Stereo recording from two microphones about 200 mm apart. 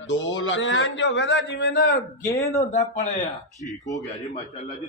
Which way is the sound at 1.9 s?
15° left (ahead or behind).